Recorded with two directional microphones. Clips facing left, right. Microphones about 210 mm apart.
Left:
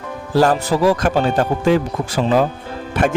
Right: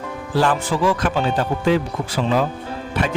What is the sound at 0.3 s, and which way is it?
Speech, 40° left (ahead or behind).